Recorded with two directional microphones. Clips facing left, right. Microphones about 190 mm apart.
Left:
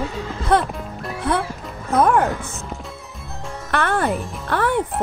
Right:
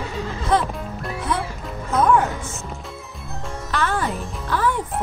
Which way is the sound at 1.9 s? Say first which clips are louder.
Left 1 dB; 60° left (ahead or behind).